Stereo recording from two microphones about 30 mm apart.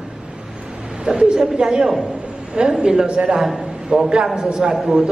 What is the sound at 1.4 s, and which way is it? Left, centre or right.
A man's voice, right.